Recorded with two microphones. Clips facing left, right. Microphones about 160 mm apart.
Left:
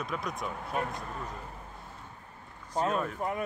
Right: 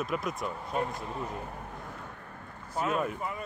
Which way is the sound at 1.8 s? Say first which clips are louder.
Right 5 dB; 75° right (ahead or behind).